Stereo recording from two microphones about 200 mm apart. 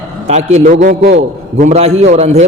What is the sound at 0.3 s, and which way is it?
A man's voice, 35° right (ahead or behind).